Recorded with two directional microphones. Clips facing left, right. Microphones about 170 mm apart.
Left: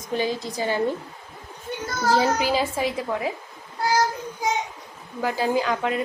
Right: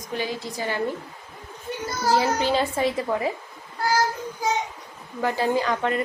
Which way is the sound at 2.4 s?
5° left (ahead or behind).